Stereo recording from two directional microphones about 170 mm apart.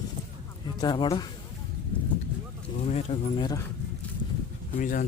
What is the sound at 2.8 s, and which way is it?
Speech, 35° left (ahead or behind).